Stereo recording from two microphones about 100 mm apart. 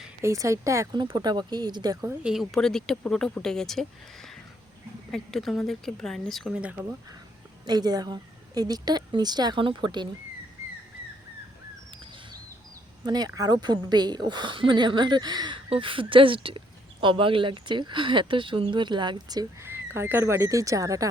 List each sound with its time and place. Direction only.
0.2 s speech: 30° right (ahead or behind)
0.9 s speech: 45° right (ahead or behind)
2.2 s speech: centre (ahead or behind)
6.5 s speech: 15° right (ahead or behind)
7.7 s speech: 40° right (ahead or behind)
13.1 s speech: 40° right (ahead or behind)
15.7 s speech: 60° right (ahead or behind)
19.6 s speech: 25° right (ahead or behind)